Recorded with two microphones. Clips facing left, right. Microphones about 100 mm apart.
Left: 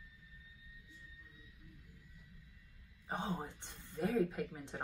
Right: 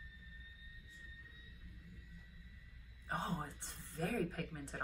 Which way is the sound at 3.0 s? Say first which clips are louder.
Left 1 dB; 20° left (ahead or behind).